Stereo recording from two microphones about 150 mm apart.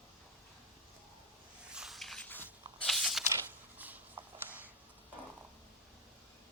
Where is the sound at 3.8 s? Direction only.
10° right (ahead or behind).